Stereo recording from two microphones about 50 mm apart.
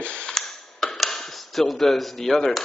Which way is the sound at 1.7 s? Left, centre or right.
Centre.